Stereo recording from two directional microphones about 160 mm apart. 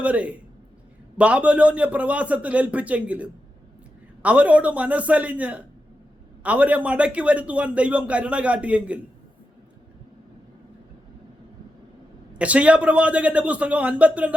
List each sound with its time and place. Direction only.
0.0 s a man's voice: 10° right (ahead or behind)
12.4 s a man's voice: 10° right (ahead or behind)